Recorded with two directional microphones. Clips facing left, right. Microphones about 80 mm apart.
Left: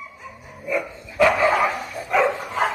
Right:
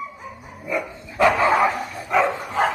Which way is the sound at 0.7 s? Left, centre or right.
Right.